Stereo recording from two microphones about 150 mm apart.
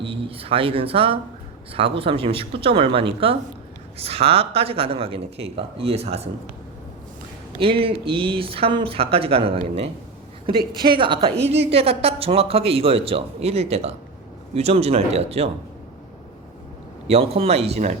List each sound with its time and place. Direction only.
0.0 s a woman's voice: 40° right (ahead or behind)
7.6 s a woman's voice: 35° right (ahead or behind)
10.8 s a woman's voice: 35° right (ahead or behind)
17.1 s speech: 40° right (ahead or behind)